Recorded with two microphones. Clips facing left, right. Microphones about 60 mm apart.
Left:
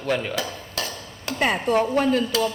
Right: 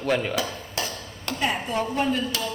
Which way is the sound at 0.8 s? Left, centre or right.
Centre.